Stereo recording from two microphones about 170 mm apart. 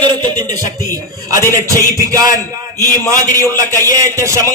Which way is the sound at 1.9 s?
20° right (ahead or behind).